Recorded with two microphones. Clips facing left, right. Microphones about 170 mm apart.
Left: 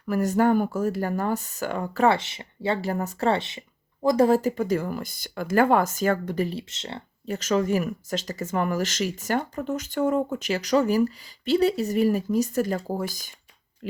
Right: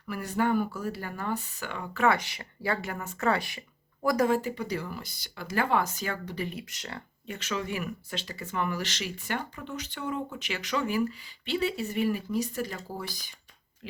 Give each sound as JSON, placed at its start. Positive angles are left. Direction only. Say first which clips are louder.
{"t": 0.1, "sound": "speech", "louder": "left 7 dB", "side_deg": 45}
{"t": 4.3, "sound": "speech", "louder": "left 7 dB", "side_deg": 40}
{"t": 6.5, "sound": "speech", "louder": "left 5 dB", "side_deg": 25}
{"t": 7.3, "sound": "speech", "louder": "left 10 dB", "side_deg": 40}